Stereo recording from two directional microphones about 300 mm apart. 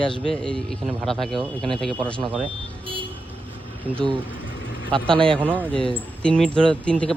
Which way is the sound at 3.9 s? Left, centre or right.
Centre.